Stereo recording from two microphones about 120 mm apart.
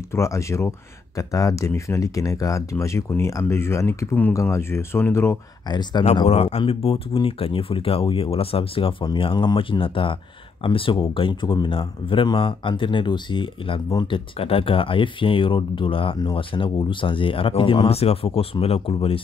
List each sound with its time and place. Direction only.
0.1 s speech: 25° left (ahead or behind)
5.7 s speech: 35° left (ahead or behind)
6.2 s speech: 60° left (ahead or behind)